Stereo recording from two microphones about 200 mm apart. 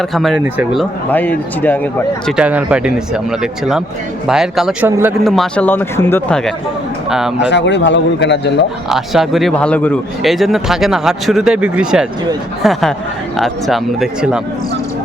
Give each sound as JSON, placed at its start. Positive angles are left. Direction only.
{"t": 0.1, "sound": "speech", "side_deg": 0}
{"t": 1.1, "sound": "speech", "side_deg": 10}
{"t": 2.3, "sound": "speech", "side_deg": -5}
{"t": 4.9, "sound": "a man's voice", "side_deg": -15}
{"t": 5.2, "sound": "speech", "side_deg": 0}
{"t": 7.3, "sound": "a man's voice", "side_deg": 60}
{"t": 8.9, "sound": "speech", "side_deg": 0}